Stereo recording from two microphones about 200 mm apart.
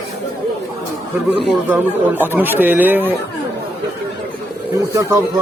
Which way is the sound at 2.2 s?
10° right (ahead or behind).